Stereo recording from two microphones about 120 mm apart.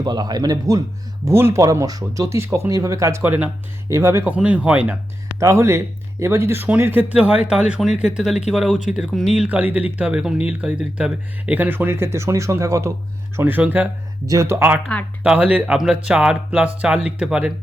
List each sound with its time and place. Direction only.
0.0 s speech: 35° right (ahead or behind)
1.2 s speech: 20° right (ahead or behind)
3.8 s speech: 25° right (ahead or behind)
4.4 s speech: 10° right (ahead or behind)
5.4 s speech: 25° right (ahead or behind)
14.3 s speech: 25° right (ahead or behind); by 17.5 s 10° right (ahead or behind)